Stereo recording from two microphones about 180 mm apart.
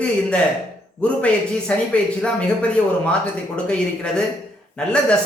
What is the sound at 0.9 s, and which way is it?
Speech, 5° left (ahead or behind).